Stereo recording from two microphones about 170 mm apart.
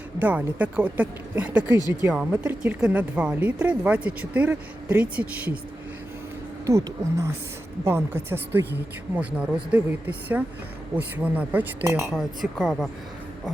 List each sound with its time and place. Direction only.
0.2 s speech: 10° right (ahead or behind)
6.7 s speech: 20° right (ahead or behind)
12.1 s a woman's voice: centre (ahead or behind)